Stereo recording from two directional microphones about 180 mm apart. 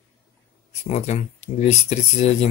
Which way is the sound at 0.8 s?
35° left (ahead or behind).